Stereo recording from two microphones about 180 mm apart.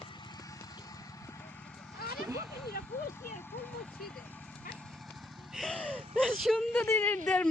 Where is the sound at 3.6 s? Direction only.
10° left (ahead or behind).